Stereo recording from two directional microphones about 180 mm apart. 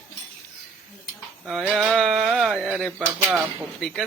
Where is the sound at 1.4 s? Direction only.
Centre (ahead or behind).